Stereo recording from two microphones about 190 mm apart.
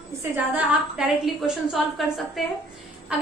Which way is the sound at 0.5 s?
5° right (ahead or behind).